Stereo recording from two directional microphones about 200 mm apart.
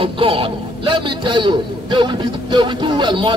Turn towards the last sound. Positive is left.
turn(degrees=-20)  # may be behind; listen again after turning